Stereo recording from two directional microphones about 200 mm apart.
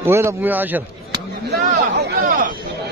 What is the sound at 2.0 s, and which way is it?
Speech, 50° right (ahead or behind).